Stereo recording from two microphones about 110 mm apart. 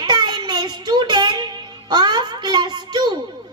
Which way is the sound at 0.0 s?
45° right (ahead or behind).